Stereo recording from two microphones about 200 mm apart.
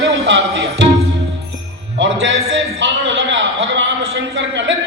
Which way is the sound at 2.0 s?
70° right (ahead or behind).